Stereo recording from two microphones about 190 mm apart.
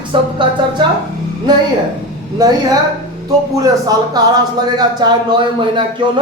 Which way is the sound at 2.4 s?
20° right (ahead or behind).